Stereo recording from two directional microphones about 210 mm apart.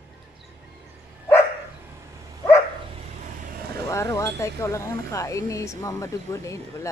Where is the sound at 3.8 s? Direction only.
15° left (ahead or behind).